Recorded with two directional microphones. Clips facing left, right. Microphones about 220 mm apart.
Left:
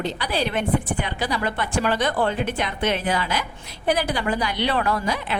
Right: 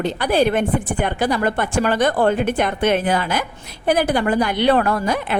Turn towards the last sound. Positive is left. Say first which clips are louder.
# right 4 dB
turn(degrees=-50)  # may be behind; listen again after turning